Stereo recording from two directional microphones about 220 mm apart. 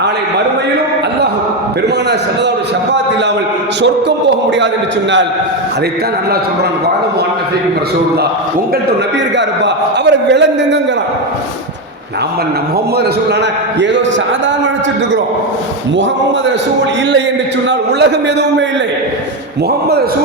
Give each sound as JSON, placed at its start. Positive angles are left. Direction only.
{"t": 3.8, "sound": "a man's voice", "side_deg": -55}
{"t": 9.6, "sound": "a man's voice", "side_deg": -50}
{"t": 13.7, "sound": "a man's voice", "side_deg": -55}
{"t": 17.7, "sound": "a man's voice", "side_deg": -50}